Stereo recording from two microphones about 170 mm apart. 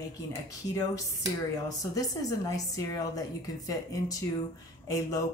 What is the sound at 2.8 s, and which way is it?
Speech, 20° left (ahead or behind).